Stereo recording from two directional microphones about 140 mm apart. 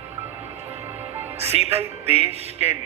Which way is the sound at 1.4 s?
50° right (ahead or behind).